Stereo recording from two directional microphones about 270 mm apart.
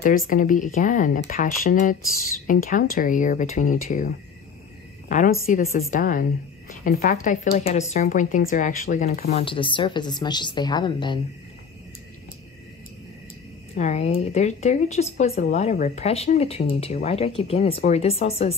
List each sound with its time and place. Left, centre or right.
0.0 s a woman's voice: left
9.4 s a woman's voice: centre
13.7 s speech: left